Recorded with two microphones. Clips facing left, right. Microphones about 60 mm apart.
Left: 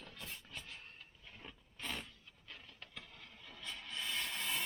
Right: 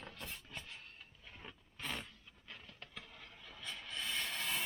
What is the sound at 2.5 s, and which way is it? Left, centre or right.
Vehicle, centre.